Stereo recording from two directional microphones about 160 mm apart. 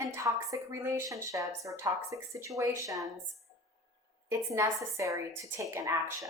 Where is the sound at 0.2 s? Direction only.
20° right (ahead or behind).